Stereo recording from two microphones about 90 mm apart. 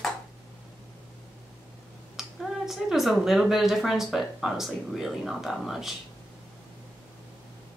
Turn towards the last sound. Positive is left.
turn(degrees=-5)  # may be behind; listen again after turning